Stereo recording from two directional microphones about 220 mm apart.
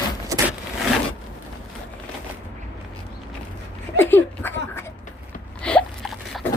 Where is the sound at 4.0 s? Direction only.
10° left (ahead or behind).